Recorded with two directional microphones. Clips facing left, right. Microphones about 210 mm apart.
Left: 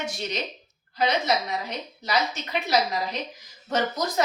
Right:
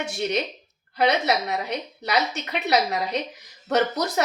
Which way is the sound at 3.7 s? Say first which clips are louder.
Right 4 dB; 70° right (ahead or behind).